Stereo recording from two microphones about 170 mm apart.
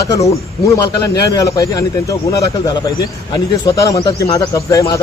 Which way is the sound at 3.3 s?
20° left (ahead or behind).